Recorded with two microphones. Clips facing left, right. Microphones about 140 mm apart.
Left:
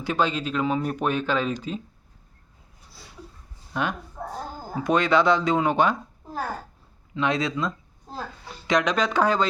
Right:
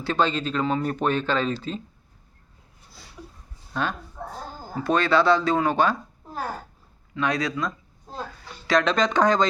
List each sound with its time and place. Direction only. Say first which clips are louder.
0.0 s speech: right 1 dB; 10° left (ahead or behind)
3.7 s speech: even; 15° left (ahead or behind)
7.1 s speech: left 1 dB; 20° left (ahead or behind)